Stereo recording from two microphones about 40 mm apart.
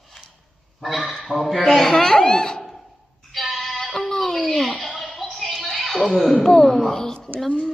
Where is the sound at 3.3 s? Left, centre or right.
Centre.